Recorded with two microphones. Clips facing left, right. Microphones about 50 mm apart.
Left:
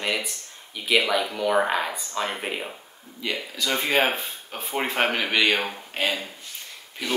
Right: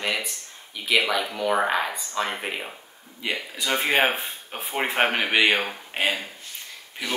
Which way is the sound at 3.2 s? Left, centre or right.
Centre.